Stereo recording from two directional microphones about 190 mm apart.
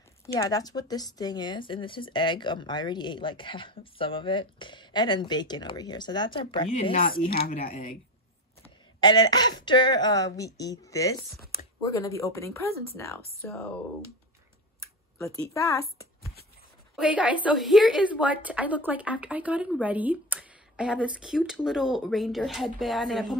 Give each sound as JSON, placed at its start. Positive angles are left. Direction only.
{"t": 0.3, "sound": "speech", "side_deg": 20}
{"t": 7.2, "sound": "speech", "side_deg": 50}
{"t": 8.6, "sound": "speech", "side_deg": 25}
{"t": 15.5, "sound": "speech", "side_deg": 15}
{"t": 17.0, "sound": "a woman's voice", "side_deg": -5}